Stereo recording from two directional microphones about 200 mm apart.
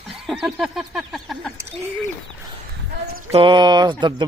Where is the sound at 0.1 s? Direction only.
Centre (ahead or behind).